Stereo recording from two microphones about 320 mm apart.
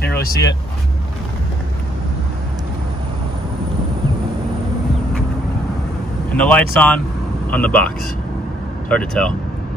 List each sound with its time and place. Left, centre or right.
0.0 s speech: left
6.3 s speech: centre